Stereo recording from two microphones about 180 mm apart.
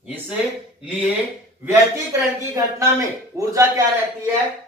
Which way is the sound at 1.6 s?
15° right (ahead or behind).